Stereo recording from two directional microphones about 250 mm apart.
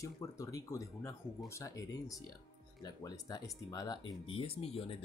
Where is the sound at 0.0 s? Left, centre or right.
Centre.